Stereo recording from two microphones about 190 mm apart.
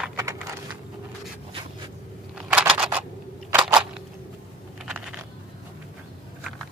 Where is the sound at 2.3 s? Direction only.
5° right (ahead or behind).